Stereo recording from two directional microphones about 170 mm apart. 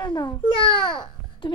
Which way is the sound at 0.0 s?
30° left (ahead or behind).